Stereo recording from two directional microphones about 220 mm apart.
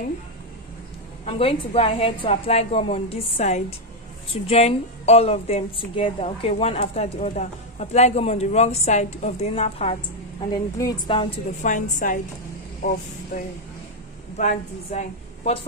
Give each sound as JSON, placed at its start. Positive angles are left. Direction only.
{"t": 1.2, "sound": "speech", "side_deg": 25}
{"t": 11.6, "sound": "a woman's voice", "side_deg": 35}